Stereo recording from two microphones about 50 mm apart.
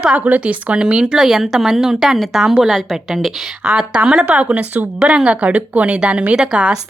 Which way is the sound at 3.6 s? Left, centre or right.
Centre.